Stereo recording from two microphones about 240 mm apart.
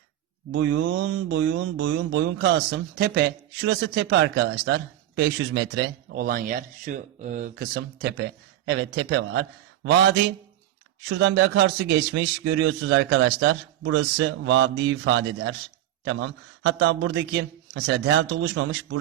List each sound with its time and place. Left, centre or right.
0.5 s speech: right